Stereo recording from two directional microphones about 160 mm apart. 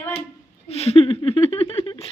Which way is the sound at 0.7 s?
40° left (ahead or behind).